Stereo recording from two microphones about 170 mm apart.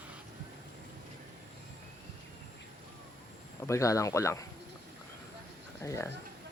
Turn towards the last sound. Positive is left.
turn(degrees=15)  # may be behind; listen again after turning